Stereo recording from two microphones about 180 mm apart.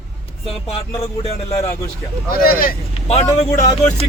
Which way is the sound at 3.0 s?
35° left (ahead or behind).